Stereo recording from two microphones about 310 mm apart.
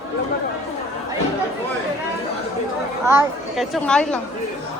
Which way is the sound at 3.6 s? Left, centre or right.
Centre.